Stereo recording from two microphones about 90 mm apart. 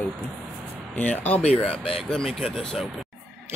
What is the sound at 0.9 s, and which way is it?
Speech, 20° left (ahead or behind).